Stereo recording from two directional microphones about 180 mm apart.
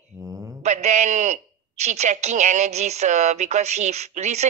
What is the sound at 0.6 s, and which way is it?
A woman's voice, 40° right (ahead or behind).